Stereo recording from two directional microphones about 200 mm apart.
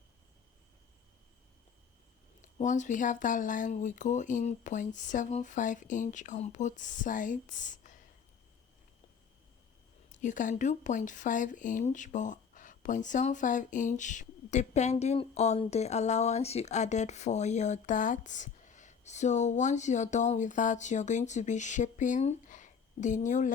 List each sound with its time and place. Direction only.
2.4 s speech: 40° left (ahead or behind)
10.1 s speech: 40° left (ahead or behind)